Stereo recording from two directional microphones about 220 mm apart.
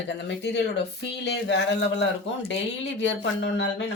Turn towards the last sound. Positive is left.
turn(degrees=55)  # may be behind; listen again after turning